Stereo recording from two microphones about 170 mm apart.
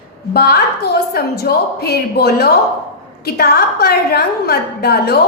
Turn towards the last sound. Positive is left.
turn(degrees=70)  # may be behind; listen again after turning